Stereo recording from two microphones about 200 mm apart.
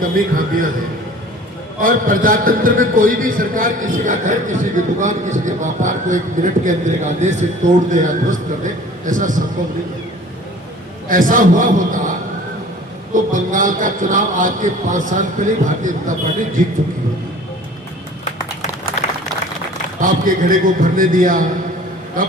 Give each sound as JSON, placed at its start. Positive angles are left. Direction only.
{"t": 0.1, "sound": "a man's voice", "side_deg": -45}
{"t": 1.8, "sound": "a man's voice", "side_deg": -45}
{"t": 11.1, "sound": "a man's voice", "side_deg": -45}
{"t": 13.1, "sound": "a man's voice", "side_deg": -40}
{"t": 20.0, "sound": "a man's voice", "side_deg": -45}